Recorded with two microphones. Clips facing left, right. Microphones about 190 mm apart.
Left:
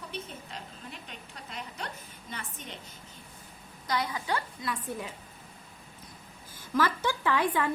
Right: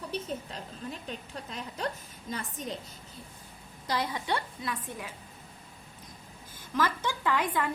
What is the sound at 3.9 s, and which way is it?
Speech, 30° right (ahead or behind).